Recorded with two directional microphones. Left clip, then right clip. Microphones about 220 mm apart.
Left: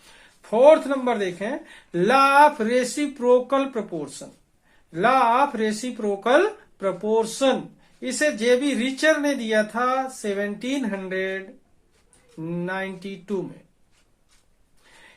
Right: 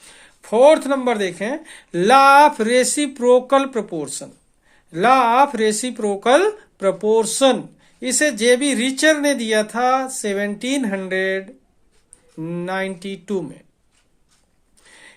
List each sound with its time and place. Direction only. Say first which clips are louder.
0.4 s speech: right 2 dB; 45° right (ahead or behind)